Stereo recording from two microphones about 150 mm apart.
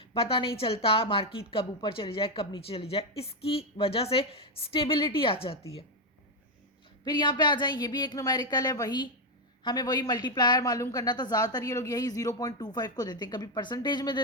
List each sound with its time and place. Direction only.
0.0 s a woman's voice: 40° left (ahead or behind)
7.0 s speech: 30° left (ahead or behind)